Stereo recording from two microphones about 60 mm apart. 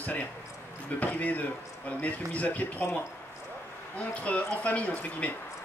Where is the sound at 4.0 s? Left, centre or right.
Left.